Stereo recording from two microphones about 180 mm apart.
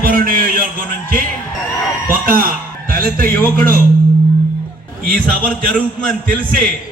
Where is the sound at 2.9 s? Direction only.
55° right (ahead or behind).